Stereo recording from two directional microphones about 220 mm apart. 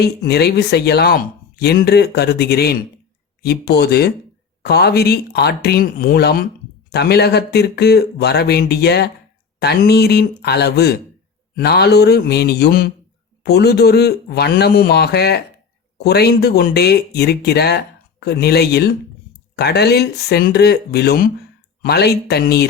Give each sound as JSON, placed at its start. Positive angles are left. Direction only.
{"t": 0.0, "sound": "speech", "side_deg": 45}